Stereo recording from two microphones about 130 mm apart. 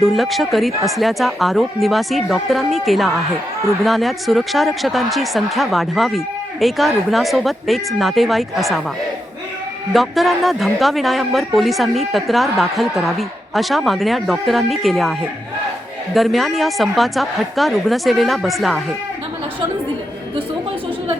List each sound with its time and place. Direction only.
0.0 s a woman's voice: centre (ahead or behind)
9.9 s a woman's voice: centre (ahead or behind)
16.1 s a woman's voice: centre (ahead or behind)